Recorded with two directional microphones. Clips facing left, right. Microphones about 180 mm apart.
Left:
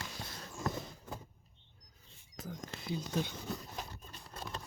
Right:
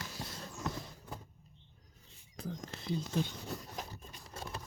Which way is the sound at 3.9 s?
10° right (ahead or behind).